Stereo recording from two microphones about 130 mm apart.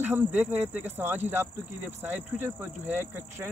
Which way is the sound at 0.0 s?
15° right (ahead or behind).